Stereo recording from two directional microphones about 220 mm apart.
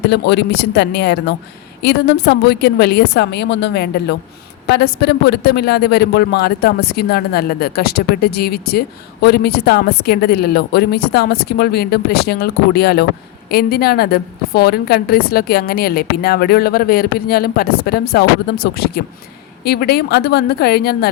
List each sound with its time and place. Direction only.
0.1 s a woman's voice: 50° left (ahead or behind)